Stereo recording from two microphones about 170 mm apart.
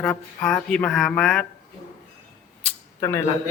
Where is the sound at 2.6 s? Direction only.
15° left (ahead or behind).